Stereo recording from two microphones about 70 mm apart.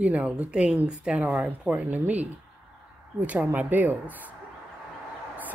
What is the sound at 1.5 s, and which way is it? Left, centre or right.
Speech, right.